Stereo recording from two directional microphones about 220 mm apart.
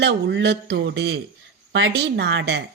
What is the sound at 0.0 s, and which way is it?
Speech, 50° right (ahead or behind).